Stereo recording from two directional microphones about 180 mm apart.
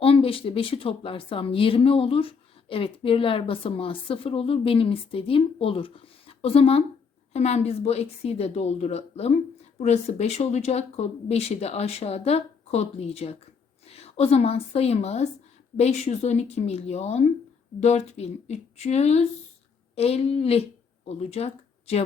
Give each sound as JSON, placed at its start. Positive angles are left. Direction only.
{"t": 0.0, "sound": "a woman's voice", "side_deg": 30}